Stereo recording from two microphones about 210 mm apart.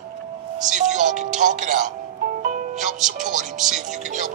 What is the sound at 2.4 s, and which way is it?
Music, 35° right (ahead or behind).